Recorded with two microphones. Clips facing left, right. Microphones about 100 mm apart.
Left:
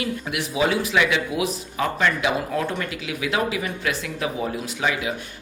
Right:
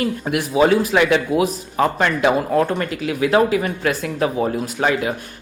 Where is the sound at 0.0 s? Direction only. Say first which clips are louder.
Right 6 dB; 45° right (ahead or behind).